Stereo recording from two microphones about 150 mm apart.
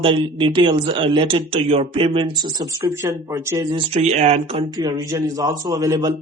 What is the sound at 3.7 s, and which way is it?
Speech, 40° right (ahead or behind).